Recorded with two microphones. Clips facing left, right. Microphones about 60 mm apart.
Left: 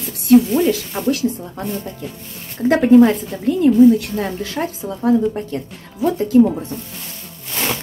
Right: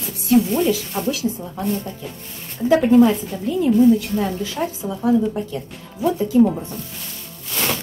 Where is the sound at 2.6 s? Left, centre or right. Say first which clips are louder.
Left 3 dB; left.